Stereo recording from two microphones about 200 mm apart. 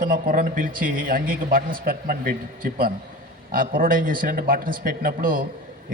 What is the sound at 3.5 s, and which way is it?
A man's voice, 45° right (ahead or behind).